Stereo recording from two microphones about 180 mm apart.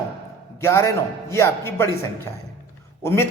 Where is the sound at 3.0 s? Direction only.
15° left (ahead or behind).